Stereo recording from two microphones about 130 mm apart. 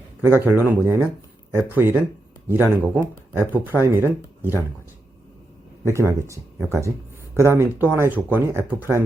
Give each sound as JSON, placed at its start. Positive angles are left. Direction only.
{"t": 0.2, "sound": "speech", "side_deg": -15}
{"t": 5.8, "sound": "speech", "side_deg": -20}